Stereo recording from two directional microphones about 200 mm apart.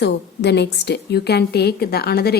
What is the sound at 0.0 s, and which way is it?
A woman's voice, 55° left (ahead or behind).